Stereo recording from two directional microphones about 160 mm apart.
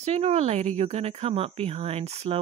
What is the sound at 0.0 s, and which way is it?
Speech, 40° right (ahead or behind).